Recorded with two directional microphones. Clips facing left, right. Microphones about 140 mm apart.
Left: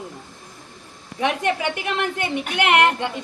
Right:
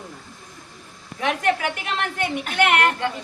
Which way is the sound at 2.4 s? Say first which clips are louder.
Left 2 dB; 15° left (ahead or behind).